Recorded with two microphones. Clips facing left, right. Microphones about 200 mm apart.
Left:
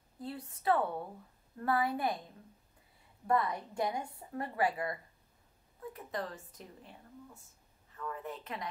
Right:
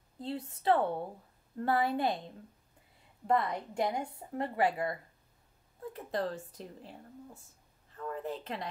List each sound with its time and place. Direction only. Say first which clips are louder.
0.2 s a woman's voice: right 4 dB; 25° right (ahead or behind)
5.9 s speech: right 6 dB; 30° right (ahead or behind)